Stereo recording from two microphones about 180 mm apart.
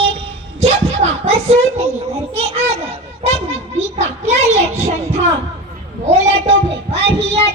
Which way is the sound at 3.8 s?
40° right (ahead or behind).